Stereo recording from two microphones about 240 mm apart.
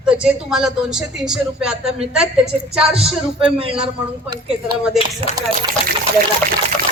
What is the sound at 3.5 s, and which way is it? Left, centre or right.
Speech, right.